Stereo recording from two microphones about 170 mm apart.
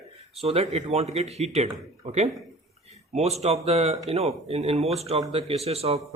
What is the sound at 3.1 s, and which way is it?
Speech, 40° right (ahead or behind).